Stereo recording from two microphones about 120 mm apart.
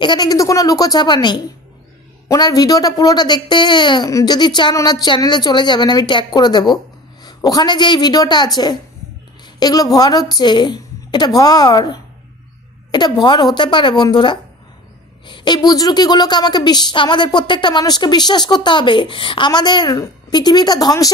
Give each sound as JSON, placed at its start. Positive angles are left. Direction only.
{"t": 0.0, "sound": "a woman's voice", "side_deg": 35}
{"t": 9.6, "sound": "a woman's voice", "side_deg": 30}